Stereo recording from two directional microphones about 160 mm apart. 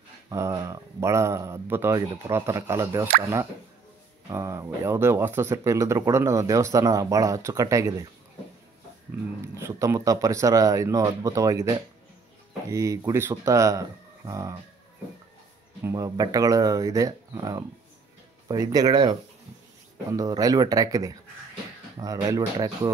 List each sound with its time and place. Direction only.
0.3 s speech: 20° right (ahead or behind)
4.3 s speech: 20° right (ahead or behind)
9.4 s speech: 15° right (ahead or behind)
12.7 s speech: 20° right (ahead or behind)
15.8 s speech: 20° right (ahead or behind)